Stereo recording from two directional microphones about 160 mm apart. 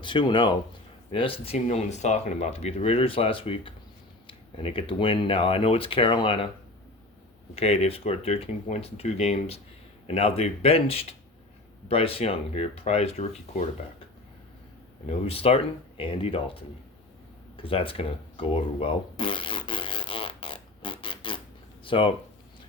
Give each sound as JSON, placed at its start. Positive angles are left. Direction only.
{"t": 0.0, "sound": "speech", "side_deg": 30}
{"t": 7.5, "sound": "speech", "side_deg": 40}
{"t": 15.3, "sound": "speech", "side_deg": 35}
{"t": 17.6, "sound": "fart", "side_deg": 35}
{"t": 21.8, "sound": "speech", "side_deg": 35}